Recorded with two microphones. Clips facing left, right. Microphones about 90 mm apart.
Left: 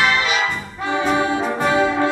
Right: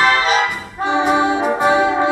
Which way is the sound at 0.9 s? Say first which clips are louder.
Right 3 dB; 20° right (ahead or behind).